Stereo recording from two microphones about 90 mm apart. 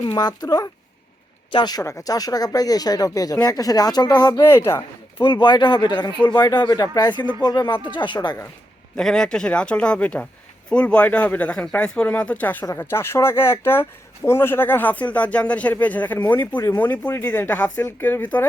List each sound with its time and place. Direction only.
0.0 s speech: 50° left (ahead or behind)
1.8 s speech: 35° left (ahead or behind); by 4.4 s 55° left (ahead or behind)
4.4 s speech: 25° left (ahead or behind)
5.1 s speech: 60° left (ahead or behind)
9.0 s speech: 5° left (ahead or behind)
12.6 s speech: 30° left (ahead or behind)
17.1 s speech: 30° left (ahead or behind)